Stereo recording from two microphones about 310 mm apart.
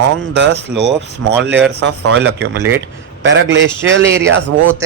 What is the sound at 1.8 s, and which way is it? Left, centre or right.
Speech, right.